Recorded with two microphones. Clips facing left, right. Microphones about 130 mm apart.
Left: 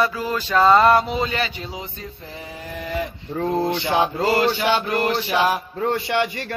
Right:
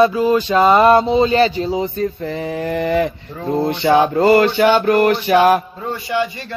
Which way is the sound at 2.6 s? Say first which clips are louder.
Right 9 dB; 70° right (ahead or behind).